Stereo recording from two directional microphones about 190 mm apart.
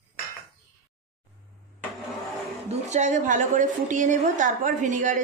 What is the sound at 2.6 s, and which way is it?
A woman's voice, 35° right (ahead or behind).